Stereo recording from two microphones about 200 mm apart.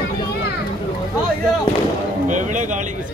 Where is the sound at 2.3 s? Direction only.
40° right (ahead or behind).